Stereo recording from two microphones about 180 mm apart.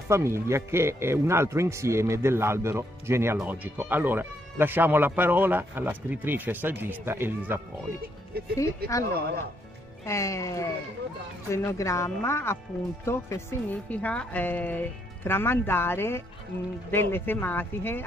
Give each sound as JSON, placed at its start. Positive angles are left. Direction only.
{"t": 0.1, "sound": "speech", "side_deg": -15}
{"t": 8.5, "sound": "a woman's voice", "side_deg": 15}
{"t": 10.0, "sound": "a woman's voice", "side_deg": 15}